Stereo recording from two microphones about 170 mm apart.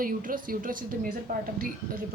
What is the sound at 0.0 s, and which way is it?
A woman's voice, 55° right (ahead or behind).